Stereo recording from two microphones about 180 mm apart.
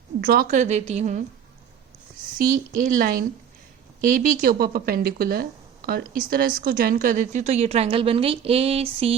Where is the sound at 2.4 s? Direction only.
50° right (ahead or behind).